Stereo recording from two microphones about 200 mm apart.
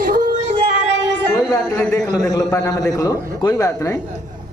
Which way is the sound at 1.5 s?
15° left (ahead or behind).